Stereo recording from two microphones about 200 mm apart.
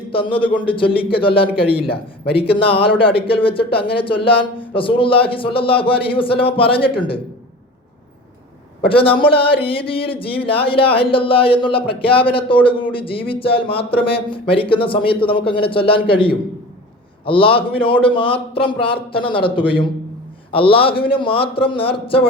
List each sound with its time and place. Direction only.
0.1 s speech: 25° left (ahead or behind)
8.9 s speech: 25° left (ahead or behind)